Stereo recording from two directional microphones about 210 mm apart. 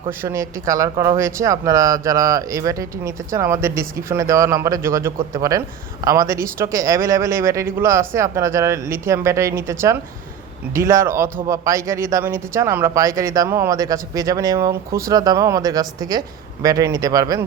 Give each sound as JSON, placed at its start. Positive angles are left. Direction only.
{"t": 0.2, "sound": "speech", "side_deg": -15}